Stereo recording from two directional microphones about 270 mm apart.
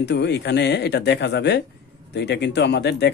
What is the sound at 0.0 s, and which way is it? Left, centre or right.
Speech, left.